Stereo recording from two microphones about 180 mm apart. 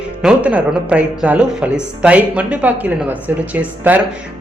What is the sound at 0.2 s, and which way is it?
A man's voice, 5° right (ahead or behind).